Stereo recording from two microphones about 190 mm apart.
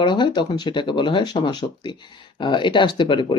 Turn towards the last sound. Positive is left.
turn(degrees=25)  # may be behind; listen again after turning